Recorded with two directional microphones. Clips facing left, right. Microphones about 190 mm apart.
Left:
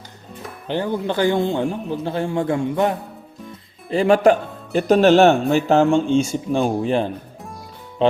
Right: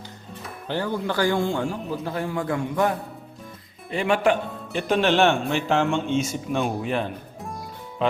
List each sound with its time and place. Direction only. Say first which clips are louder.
0.7 s a man's voice: left 4 dB; 20° left (ahead or behind)
3.8 s speech: left 7 dB; 35° left (ahead or behind)